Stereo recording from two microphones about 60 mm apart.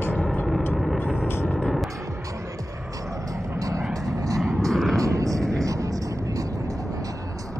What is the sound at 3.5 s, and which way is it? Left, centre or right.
Vehicle, right.